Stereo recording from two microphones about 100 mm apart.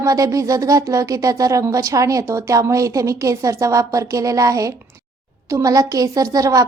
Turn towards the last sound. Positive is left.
turn(degrees=-35)  # may be behind; listen again after turning